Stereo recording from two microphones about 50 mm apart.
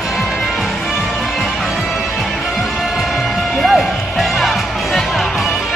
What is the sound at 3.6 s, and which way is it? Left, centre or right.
Music, centre.